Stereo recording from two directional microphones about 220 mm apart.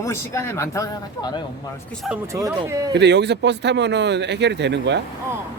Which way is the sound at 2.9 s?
50° right (ahead or behind).